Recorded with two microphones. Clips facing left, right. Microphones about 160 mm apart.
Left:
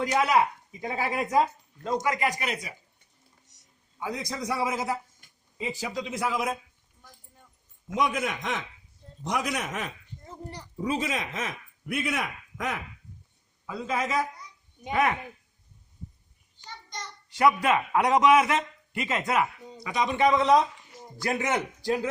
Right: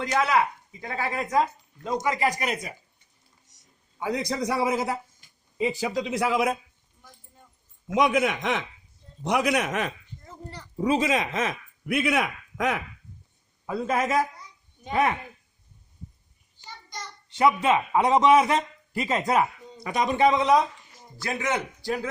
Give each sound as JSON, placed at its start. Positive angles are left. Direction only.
{"t": 0.0, "sound": "speech", "side_deg": 15}
{"t": 1.8, "sound": "a man's voice", "side_deg": -20}
{"t": 2.1, "sound": "speech", "side_deg": -40}
{"t": 4.0, "sound": "a man's voice", "side_deg": -70}
{"t": 7.9, "sound": "speech", "side_deg": -80}
{"t": 10.2, "sound": "speech", "side_deg": 15}
{"t": 10.8, "sound": "a man's voice", "side_deg": -90}
{"t": 13.7, "sound": "speech", "side_deg": -55}
{"t": 17.2, "sound": "a man's voice", "side_deg": -25}
{"t": 19.8, "sound": "speech", "side_deg": -50}
{"t": 20.1, "sound": "a man's voice", "side_deg": -25}
{"t": 20.4, "sound": "a woman's voice", "side_deg": 0}
{"t": 21.8, "sound": "speech", "side_deg": 15}